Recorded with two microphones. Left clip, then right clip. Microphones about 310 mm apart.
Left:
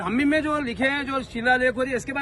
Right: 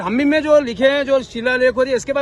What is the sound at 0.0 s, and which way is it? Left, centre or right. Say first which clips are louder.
A man's voice: right 6 dB; centre.